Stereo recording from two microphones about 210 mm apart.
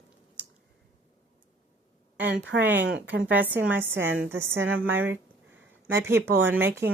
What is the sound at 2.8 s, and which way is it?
Speech, 60° right (ahead or behind).